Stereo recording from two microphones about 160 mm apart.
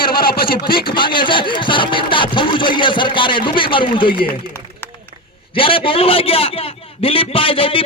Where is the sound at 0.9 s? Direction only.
30° left (ahead or behind).